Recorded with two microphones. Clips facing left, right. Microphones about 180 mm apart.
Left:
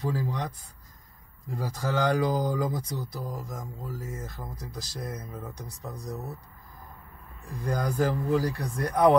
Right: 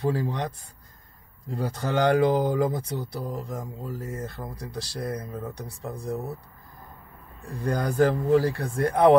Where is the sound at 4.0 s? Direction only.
65° right (ahead or behind).